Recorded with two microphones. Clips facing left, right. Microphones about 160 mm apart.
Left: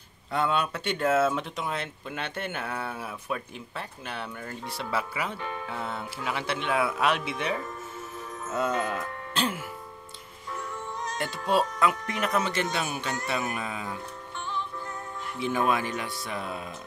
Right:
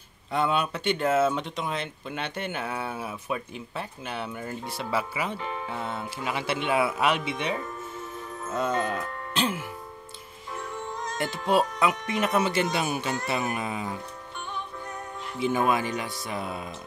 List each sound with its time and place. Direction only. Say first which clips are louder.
0.3 s speech: right 1 dB; centre (ahead or behind)
8.9 s speech: right 1 dB; centre (ahead or behind)
11.4 s speech: right 1 dB; centre (ahead or behind)
12.1 s speech: right 3 dB; 25° right (ahead or behind)
12.4 s speech: right 3 dB; 10° right (ahead or behind)
13.4 s speech: right 3 dB; 20° right (ahead or behind)
15.4 s speech: right 2 dB; 5° right (ahead or behind)